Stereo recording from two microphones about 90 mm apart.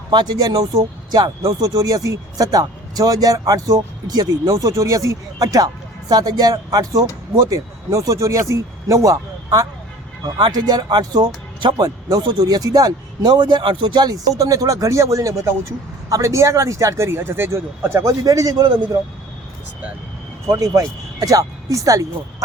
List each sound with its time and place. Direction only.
0.1 s speech: 50° right (ahead or behind); by 18.1 s 30° right (ahead or behind)
18.2 s speech: 40° right (ahead or behind)
20.5 s speech: 40° right (ahead or behind)